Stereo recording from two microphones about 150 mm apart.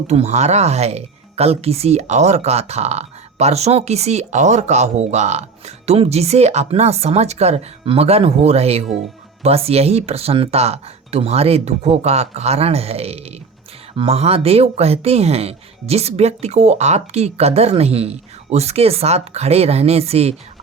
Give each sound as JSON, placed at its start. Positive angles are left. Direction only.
{"t": 0.1, "sound": "speech", "side_deg": -50}